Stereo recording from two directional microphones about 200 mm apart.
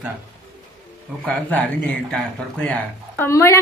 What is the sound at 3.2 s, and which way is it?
Speech, 15° left (ahead or behind).